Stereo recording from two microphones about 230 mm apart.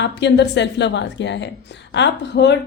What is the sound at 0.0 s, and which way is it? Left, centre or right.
A woman's voice, left.